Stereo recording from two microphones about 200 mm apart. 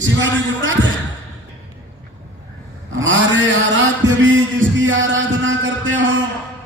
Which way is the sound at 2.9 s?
70° right (ahead or behind).